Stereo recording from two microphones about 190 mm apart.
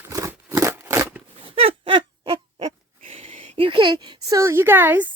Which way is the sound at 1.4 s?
30° right (ahead or behind).